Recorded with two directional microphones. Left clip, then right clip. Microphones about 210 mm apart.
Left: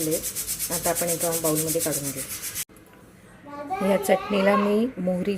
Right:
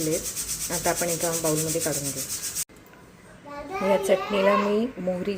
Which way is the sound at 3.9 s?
10° left (ahead or behind).